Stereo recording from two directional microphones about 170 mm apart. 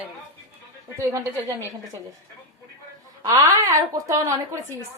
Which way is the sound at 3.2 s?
20° right (ahead or behind).